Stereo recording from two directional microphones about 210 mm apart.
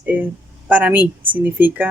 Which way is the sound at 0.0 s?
10° right (ahead or behind).